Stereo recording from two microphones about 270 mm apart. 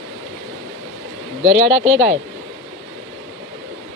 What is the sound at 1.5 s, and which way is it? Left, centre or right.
Speech, right.